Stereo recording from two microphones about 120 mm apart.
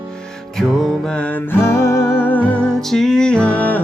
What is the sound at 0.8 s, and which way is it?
Music, 10° left (ahead or behind).